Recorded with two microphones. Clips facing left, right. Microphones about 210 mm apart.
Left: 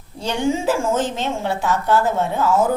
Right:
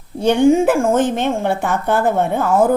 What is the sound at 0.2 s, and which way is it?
A woman's voice, 55° right (ahead or behind).